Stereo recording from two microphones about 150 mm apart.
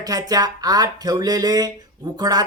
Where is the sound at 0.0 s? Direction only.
25° right (ahead or behind).